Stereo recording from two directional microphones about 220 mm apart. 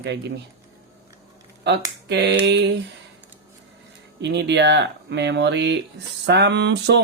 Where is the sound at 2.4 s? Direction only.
50° right (ahead or behind).